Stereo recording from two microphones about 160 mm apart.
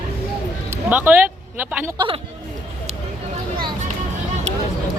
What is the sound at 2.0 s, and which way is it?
Speech, 35° right (ahead or behind).